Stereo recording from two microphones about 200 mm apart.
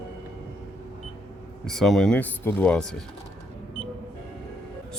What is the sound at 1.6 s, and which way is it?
Speech, centre (ahead or behind).